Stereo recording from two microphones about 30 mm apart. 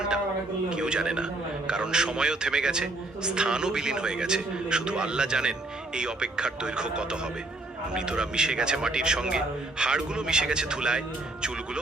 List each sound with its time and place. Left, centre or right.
0.7 s a man's voice: right